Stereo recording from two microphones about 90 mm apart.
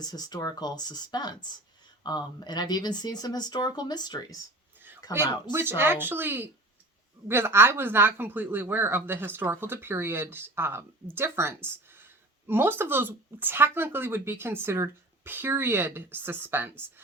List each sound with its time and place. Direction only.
0.0 s speech: 45° left (ahead or behind)
5.5 s speech: 25° right (ahead or behind)